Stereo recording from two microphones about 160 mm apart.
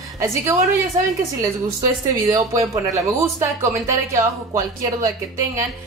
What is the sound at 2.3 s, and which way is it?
Speech, 20° right (ahead or behind).